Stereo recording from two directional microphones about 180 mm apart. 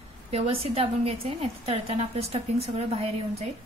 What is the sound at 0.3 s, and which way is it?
Speech, 35° right (ahead or behind).